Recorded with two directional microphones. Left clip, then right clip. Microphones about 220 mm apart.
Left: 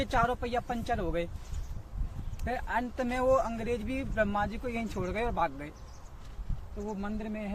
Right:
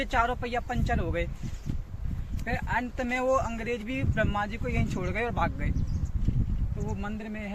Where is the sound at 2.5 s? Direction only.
Centre (ahead or behind).